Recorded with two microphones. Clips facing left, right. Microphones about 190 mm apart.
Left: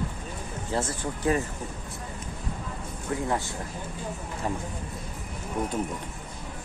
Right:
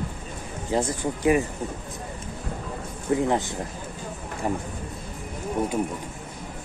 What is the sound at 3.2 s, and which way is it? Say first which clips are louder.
Speech: right 4 dB; 20° right (ahead or behind).